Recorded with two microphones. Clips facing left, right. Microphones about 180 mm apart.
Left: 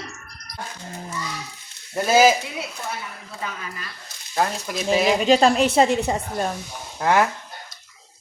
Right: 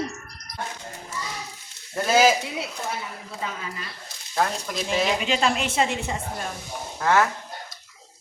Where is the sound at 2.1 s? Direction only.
5° left (ahead or behind).